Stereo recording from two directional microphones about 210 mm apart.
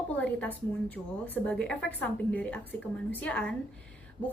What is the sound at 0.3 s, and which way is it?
A woman's voice, 5° left (ahead or behind).